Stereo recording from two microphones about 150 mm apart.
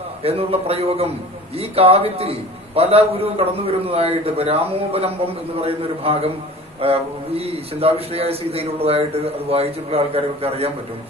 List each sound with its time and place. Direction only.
0.2 s a man's voice: 40° right (ahead or behind)